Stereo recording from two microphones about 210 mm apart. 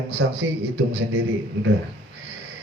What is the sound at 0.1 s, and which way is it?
Speech, 55° right (ahead or behind).